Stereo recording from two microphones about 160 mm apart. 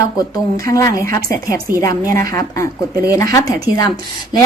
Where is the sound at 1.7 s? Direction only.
65° right (ahead or behind).